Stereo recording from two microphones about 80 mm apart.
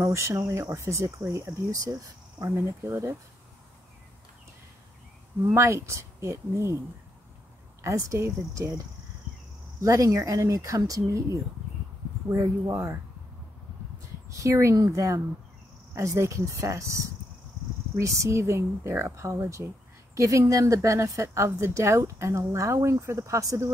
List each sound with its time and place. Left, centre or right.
0.0 s speech: right
2.4 s speech: right
5.4 s speech: right
7.8 s speech: right
14.4 s speech: right